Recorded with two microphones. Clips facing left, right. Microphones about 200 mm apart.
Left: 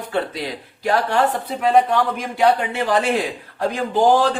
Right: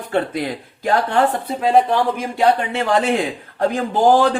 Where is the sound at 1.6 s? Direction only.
30° right (ahead or behind).